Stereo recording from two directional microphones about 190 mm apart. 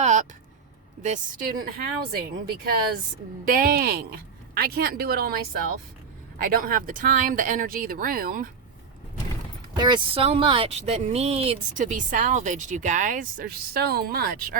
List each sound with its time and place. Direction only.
0.0 s a sound: 40° right (ahead or behind)
1.0 s speech: 45° right (ahead or behind)
9.7 s speech: 25° right (ahead or behind); by 14.6 s 50° right (ahead or behind)